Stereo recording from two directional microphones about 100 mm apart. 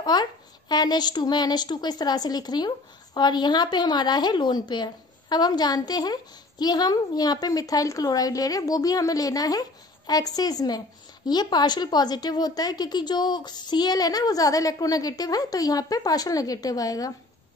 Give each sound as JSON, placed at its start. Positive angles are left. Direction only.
{"t": 0.0, "sound": "a woman's voice", "side_deg": 45}